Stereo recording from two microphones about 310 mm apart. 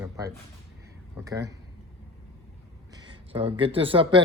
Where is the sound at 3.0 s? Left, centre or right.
Centre.